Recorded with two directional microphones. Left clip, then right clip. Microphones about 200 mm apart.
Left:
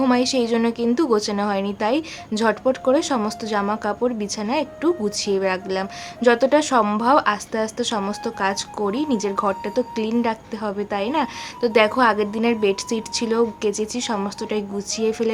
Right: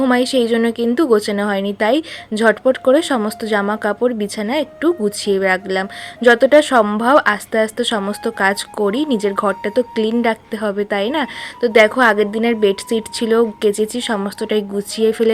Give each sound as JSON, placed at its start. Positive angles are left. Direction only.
{"t": 0.0, "sound": "a woman's voice", "side_deg": -20}